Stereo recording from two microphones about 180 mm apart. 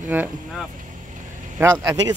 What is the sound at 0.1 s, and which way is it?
Speech, 10° right (ahead or behind).